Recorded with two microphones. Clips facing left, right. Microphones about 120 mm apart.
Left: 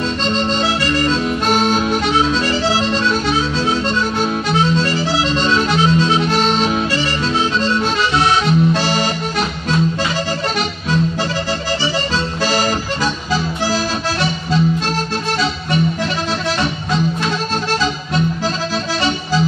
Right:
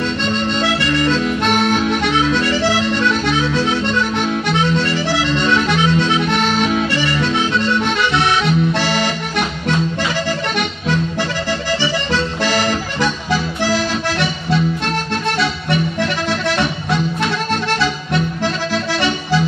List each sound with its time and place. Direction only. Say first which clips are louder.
1.1 s music: even; 30° left (ahead or behind)
5.1 s accordion: right 1 dB; 30° left (ahead or behind)
6.3 s harmonica: left 1 dB; 30° left (ahead or behind)
7.0 s music: right 1 dB; 30° left (ahead or behind)
7.8 s accordion: even; 65° right (ahead or behind)
8.7 s music: even; 60° right (ahead or behind)
13.7 s music: right 3 dB; 30° left (ahead or behind)
17.5 s music: right 1 dB; 60° right (ahead or behind)
18.7 s accordion: right 1 dB; 30° left (ahead or behind)